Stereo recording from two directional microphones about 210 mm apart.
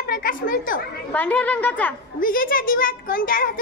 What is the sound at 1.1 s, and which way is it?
Speech, 5° left (ahead or behind).